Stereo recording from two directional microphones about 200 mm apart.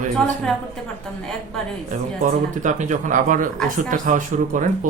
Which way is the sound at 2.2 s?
40° right (ahead or behind).